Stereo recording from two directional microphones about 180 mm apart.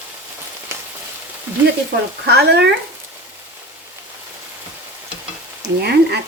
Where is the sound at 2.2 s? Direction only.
65° right (ahead or behind).